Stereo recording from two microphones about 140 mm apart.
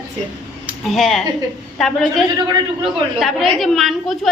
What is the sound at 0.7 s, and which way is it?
A woman's voice, centre (ahead or behind).